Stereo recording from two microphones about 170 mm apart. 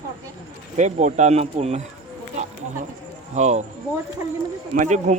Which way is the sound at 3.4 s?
40° right (ahead or behind).